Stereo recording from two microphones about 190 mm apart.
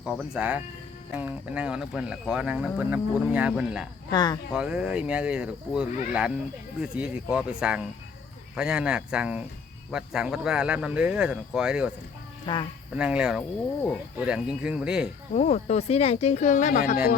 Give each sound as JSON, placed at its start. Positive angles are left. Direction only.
{"t": 0.0, "sound": "speech", "side_deg": -5}
{"t": 4.1, "sound": "speech", "side_deg": 20}
{"t": 4.5, "sound": "speech", "side_deg": -5}
{"t": 12.5, "sound": "speech", "side_deg": 25}
{"t": 12.9, "sound": "speech", "side_deg": -5}
{"t": 15.3, "sound": "speech", "side_deg": 35}